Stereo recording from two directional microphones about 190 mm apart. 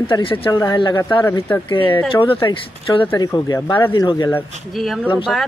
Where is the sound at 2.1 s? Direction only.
25° left (ahead or behind).